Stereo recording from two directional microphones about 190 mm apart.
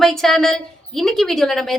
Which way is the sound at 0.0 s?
Centre (ahead or behind).